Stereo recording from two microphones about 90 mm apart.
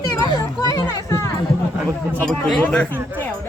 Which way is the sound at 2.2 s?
5° left (ahead or behind).